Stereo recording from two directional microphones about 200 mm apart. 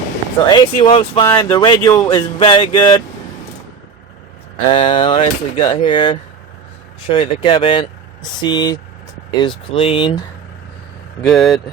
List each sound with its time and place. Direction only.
0.5 s speech: 25° left (ahead or behind)
4.7 s speech: 25° left (ahead or behind)
11.2 s speech: centre (ahead or behind)